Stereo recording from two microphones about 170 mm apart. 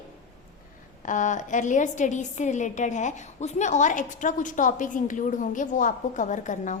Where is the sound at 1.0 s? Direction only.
45° left (ahead or behind).